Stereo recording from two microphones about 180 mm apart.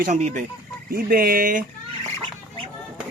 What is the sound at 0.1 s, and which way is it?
Speech, 40° right (ahead or behind).